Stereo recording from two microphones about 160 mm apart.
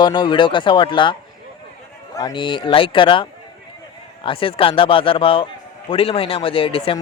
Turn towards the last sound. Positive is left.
turn(degrees=35)  # may be behind; listen again after turning